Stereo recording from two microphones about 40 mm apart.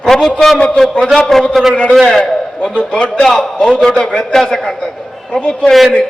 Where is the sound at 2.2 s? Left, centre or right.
Centre.